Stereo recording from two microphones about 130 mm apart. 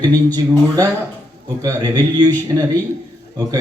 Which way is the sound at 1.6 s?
30° right (ahead or behind).